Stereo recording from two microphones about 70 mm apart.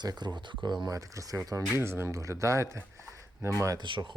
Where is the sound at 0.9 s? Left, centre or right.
Right.